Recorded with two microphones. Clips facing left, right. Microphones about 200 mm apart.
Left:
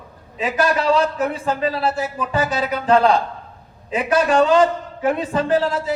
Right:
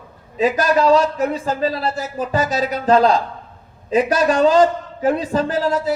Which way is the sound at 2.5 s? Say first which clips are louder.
Right 1 dB; 40° right (ahead or behind).